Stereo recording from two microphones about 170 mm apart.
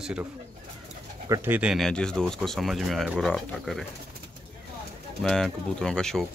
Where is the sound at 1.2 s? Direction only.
20° right (ahead or behind).